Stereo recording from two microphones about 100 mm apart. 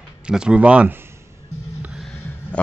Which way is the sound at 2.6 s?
15° left (ahead or behind).